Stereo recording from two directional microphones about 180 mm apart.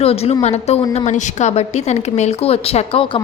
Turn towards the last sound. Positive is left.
turn(degrees=30)  # may be behind; listen again after turning